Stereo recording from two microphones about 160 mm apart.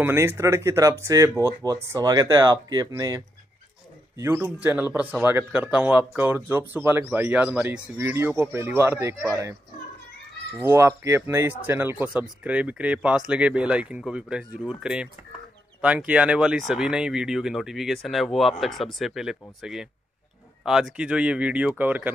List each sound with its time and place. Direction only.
0.0 s speech: 15° right (ahead or behind)
10.6 s speech: 15° right (ahead or behind)